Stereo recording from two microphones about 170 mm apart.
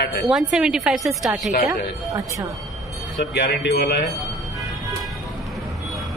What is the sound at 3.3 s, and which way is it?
Speech, 80° left.